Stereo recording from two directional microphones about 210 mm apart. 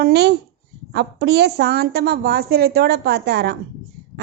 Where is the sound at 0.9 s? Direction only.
50° right (ahead or behind).